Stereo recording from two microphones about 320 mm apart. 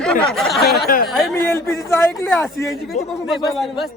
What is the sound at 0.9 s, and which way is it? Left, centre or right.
Speech, left.